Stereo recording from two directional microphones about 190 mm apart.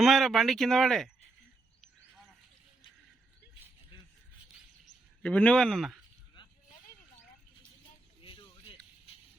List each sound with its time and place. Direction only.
0.0 s speech: centre (ahead or behind)
5.2 s speech: 5° left (ahead or behind)
8.2 s a sound: 25° left (ahead or behind)